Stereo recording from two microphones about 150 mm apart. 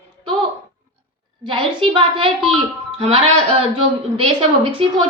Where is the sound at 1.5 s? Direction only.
35° right (ahead or behind).